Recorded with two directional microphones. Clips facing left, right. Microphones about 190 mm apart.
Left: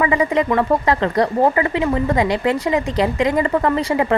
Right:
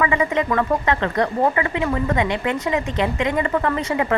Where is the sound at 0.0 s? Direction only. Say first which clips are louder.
Left 3 dB; 35° left (ahead or behind).